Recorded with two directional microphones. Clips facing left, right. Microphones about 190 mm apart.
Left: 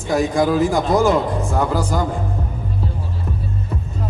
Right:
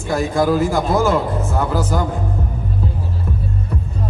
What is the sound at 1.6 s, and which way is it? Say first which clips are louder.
Speech: even; 10° left (ahead or behind).